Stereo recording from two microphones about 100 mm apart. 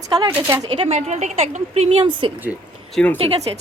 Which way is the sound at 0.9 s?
90° right.